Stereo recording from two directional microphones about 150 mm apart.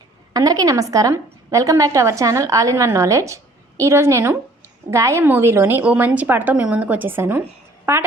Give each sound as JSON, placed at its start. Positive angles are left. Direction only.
{"t": 0.3, "sound": "a woman's voice", "side_deg": -25}